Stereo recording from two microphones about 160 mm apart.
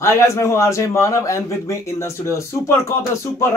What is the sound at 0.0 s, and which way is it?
Speech, 15° left (ahead or behind).